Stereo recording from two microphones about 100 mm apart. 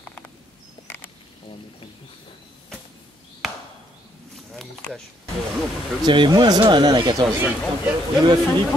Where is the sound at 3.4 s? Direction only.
5° right (ahead or behind).